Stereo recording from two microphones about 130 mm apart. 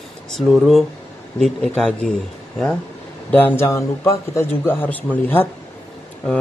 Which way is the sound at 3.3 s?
15° left (ahead or behind).